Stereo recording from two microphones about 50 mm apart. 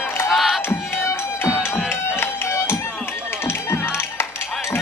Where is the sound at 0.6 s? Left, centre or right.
Left.